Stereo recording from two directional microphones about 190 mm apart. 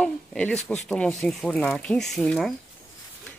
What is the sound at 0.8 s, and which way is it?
Speech, 5° left (ahead or behind).